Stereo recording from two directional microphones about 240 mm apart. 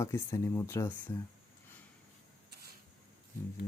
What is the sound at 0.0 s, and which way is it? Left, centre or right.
Speech, centre.